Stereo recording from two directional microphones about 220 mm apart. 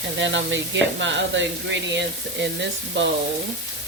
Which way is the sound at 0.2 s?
55° right (ahead or behind).